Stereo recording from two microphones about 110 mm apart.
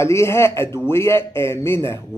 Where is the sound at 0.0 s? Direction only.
25° left (ahead or behind).